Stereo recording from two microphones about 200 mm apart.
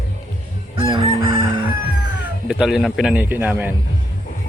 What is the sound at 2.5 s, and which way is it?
A man's voice, centre (ahead or behind).